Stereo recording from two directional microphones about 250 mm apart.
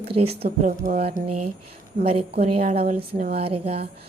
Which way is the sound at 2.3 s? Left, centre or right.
Right.